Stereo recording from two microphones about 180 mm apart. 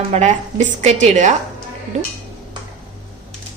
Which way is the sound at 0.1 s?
40° right (ahead or behind).